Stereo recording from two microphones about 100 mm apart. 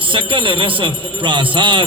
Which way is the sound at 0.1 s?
60° right (ahead or behind).